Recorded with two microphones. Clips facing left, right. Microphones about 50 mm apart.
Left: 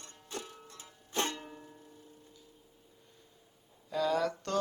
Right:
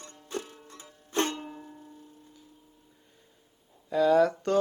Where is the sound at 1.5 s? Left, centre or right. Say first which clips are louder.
Right 6 dB; centre.